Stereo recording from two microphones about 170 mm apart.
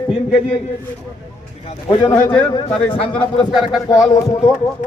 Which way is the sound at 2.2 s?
10° left (ahead or behind).